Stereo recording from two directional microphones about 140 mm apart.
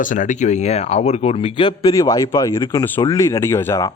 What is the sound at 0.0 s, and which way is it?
Speech, 65° left (ahead or behind).